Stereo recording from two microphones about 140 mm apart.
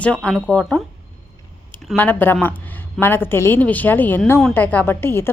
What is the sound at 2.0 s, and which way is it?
A woman's voice, 15° left (ahead or behind).